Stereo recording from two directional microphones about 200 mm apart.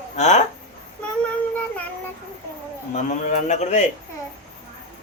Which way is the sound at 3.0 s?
35° left (ahead or behind).